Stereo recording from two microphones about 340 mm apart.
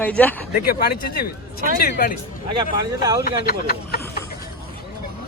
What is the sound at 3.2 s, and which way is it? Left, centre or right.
Speech, left.